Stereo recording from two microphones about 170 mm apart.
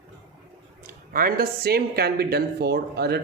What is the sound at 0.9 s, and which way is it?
Speech, 60° right (ahead or behind).